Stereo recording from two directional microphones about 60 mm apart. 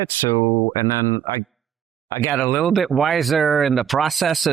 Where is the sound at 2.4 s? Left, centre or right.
Left.